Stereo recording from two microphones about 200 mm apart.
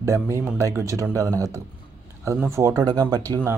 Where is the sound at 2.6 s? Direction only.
20° right (ahead or behind).